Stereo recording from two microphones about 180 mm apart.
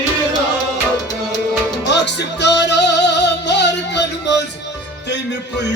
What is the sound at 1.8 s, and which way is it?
Music, 75° left (ahead or behind).